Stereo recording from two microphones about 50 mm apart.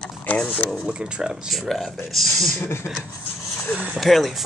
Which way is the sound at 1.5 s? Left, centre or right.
Centre.